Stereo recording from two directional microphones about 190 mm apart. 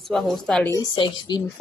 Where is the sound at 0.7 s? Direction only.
20° left (ahead or behind).